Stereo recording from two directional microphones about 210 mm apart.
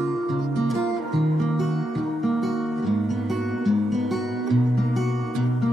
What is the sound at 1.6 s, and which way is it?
Music, centre (ahead or behind).